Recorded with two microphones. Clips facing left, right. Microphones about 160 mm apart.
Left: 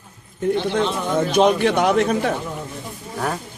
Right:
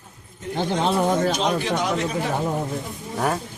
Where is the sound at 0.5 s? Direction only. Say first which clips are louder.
Even; 45° right (ahead or behind).